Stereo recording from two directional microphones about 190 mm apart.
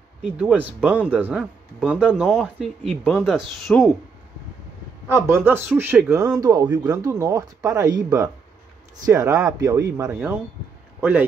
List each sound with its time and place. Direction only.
0.2 s speech: 5° right (ahead or behind)
5.0 s a man's voice: 15° right (ahead or behind)